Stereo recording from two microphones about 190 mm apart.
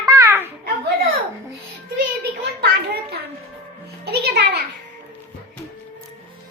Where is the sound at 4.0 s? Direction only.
55° right (ahead or behind).